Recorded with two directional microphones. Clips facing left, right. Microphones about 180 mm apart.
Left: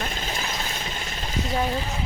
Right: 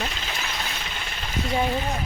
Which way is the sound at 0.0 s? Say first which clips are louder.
Left 1 dB; 45° left (ahead or behind).